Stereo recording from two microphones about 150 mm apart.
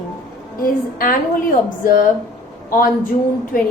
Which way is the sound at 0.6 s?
70° left (ahead or behind).